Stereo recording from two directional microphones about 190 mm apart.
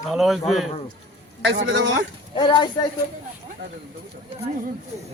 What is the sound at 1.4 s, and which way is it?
Speech, 70° right (ahead or behind).